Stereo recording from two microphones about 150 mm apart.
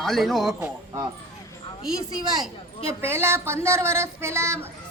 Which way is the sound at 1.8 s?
5° right (ahead or behind).